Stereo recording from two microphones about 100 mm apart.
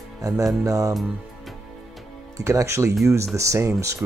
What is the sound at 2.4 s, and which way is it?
Speech, 30° right (ahead or behind).